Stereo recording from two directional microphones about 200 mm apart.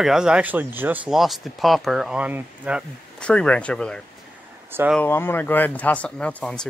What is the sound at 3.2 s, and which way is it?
Speech, 5° left (ahead or behind).